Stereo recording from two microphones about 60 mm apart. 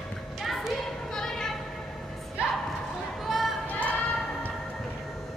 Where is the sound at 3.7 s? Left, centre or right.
Left.